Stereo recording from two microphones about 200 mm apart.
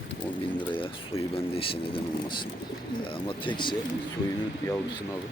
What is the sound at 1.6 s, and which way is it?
A man's voice, 25° left (ahead or behind).